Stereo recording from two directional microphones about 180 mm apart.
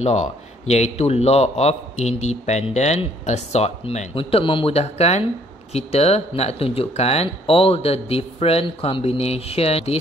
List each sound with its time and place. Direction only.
0.0 s a man's voice: 40° left (ahead or behind)